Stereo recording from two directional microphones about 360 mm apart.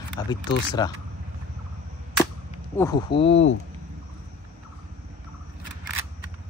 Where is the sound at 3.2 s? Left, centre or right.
Left.